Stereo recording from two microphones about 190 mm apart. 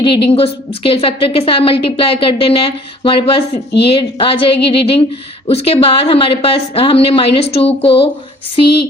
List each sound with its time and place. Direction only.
0.0 s a woman's voice: 30° left (ahead or behind)